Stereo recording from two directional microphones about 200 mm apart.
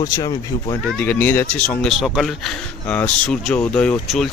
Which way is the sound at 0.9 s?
5° left (ahead or behind).